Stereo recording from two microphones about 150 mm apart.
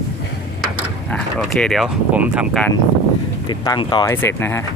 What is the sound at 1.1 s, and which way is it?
Speech, 5° left (ahead or behind).